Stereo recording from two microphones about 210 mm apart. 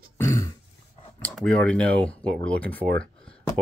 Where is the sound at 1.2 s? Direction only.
5° left (ahead or behind).